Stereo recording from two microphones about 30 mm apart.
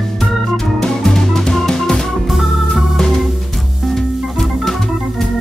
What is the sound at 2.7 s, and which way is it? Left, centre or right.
Organ, centre.